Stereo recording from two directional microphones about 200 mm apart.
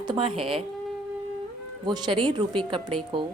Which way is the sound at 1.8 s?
20° right (ahead or behind).